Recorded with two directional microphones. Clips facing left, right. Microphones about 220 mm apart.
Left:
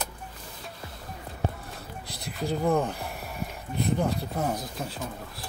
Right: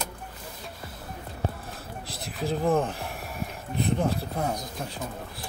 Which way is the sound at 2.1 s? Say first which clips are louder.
Right 1 dB; centre (ahead or behind).